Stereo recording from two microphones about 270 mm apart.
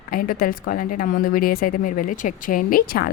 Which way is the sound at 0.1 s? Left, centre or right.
Left.